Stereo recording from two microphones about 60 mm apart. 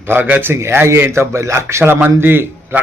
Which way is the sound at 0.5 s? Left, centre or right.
Right.